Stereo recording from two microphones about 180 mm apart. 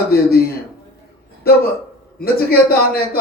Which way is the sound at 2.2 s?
60° left (ahead or behind).